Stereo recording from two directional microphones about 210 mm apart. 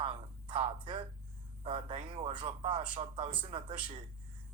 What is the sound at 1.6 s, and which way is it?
Speech, 25° right (ahead or behind).